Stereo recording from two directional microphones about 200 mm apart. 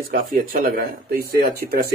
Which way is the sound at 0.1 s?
45° right (ahead or behind).